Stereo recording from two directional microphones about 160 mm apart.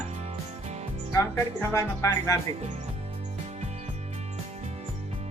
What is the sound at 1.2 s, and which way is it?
Speech, 20° left (ahead or behind).